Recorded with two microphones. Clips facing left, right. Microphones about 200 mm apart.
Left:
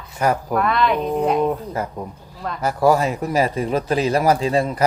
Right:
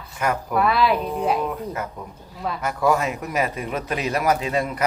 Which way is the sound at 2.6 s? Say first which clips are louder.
Left 5 dB; 35° left (ahead or behind).